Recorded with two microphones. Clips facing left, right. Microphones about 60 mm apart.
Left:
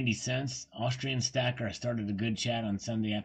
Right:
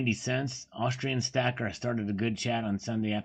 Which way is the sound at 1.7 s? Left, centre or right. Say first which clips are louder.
Right 2 dB; right.